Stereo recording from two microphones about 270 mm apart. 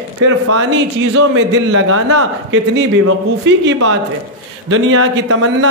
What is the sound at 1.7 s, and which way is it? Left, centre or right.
Speech, right.